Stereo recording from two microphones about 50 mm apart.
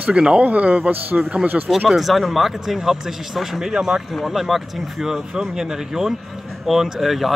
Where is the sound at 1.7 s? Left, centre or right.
Centre.